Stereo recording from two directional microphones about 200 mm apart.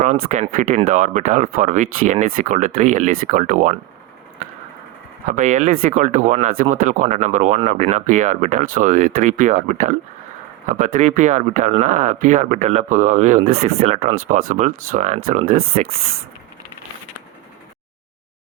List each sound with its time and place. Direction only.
0.0 s speech: 35° right (ahead or behind)
5.3 s speech: 40° right (ahead or behind)